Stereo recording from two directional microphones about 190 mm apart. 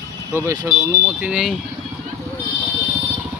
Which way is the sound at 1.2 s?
5° right (ahead or behind).